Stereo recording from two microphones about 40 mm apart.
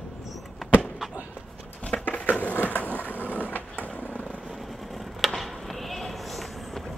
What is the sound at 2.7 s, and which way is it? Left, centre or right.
Skateboard, left.